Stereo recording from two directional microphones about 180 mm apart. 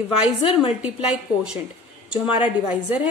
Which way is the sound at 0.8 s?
5° right (ahead or behind).